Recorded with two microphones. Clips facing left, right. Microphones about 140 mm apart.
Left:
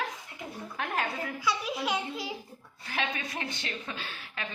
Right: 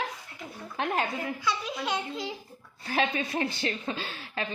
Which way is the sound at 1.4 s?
10° left (ahead or behind).